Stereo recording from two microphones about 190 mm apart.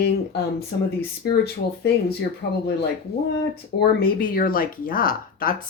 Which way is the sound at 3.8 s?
55° left (ahead or behind).